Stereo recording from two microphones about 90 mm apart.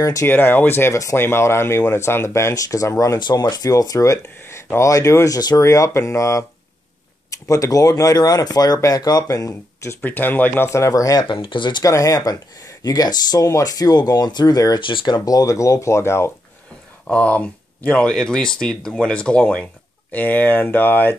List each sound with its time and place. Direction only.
0.0 s speech: 40° left (ahead or behind)
0.3 s speech: 20° left (ahead or behind); by 3.2 s 35° left (ahead or behind)
3.2 s speech: 55° left (ahead or behind)
5.6 s speech: 35° left (ahead or behind)
7.4 s speech: 40° left (ahead or behind)
10.0 s speech: 20° left (ahead or behind)
10.7 s speech: 35° left (ahead or behind)
11.2 s speech: 70° left (ahead or behind)
11.8 s speech: 40° left (ahead or behind)
14.8 s speech: 60° left (ahead or behind); by 16.3 s 30° left (ahead or behind)
17.1 s speech: 15° left (ahead or behind)